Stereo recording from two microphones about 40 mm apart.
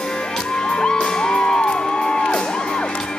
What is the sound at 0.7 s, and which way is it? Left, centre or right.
Music, left.